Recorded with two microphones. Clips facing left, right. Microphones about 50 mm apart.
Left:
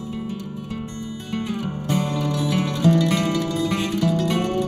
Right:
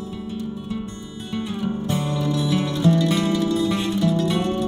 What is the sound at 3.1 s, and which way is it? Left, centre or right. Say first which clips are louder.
Music: right 1 dB; left.